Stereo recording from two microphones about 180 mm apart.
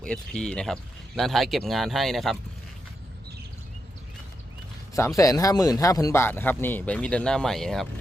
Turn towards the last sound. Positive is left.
turn(degrees=0)  # may be behind; listen again after turning